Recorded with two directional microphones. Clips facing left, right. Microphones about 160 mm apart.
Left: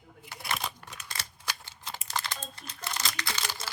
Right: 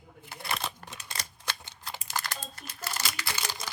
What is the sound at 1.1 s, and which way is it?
Scissors, 20° right (ahead or behind).